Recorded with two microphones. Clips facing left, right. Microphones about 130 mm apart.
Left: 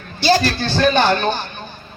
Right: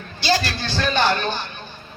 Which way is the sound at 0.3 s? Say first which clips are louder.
Left 6 dB; 35° left (ahead or behind).